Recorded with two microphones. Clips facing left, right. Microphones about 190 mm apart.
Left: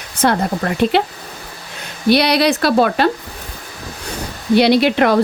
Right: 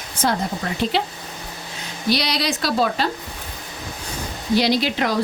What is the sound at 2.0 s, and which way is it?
Speech, 60° left (ahead or behind).